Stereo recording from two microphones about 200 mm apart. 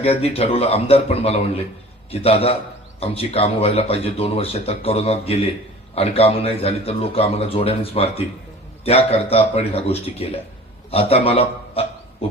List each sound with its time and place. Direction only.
0.0 s speech: 30° left (ahead or behind)